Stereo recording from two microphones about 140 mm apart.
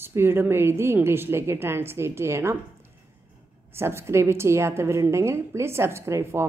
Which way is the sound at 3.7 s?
20° right (ahead or behind).